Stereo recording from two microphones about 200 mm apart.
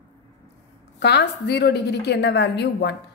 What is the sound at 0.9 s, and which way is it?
A woman's voice, 55° left (ahead or behind).